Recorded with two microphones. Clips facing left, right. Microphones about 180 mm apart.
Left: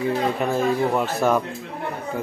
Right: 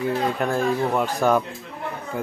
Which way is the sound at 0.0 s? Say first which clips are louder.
Left 1 dB; centre (ahead or behind).